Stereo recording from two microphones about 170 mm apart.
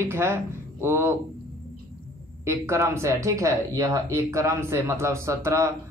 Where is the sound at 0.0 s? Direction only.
15° right (ahead or behind).